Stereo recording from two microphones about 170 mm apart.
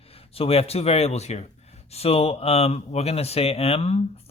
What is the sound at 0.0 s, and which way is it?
Speech, 35° left (ahead or behind).